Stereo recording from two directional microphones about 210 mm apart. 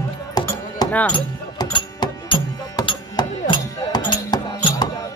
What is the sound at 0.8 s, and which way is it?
Music, 20° left (ahead or behind).